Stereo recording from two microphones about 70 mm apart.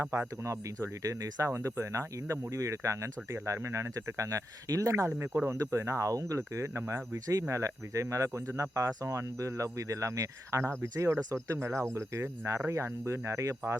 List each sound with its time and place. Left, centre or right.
0.0 s speech: right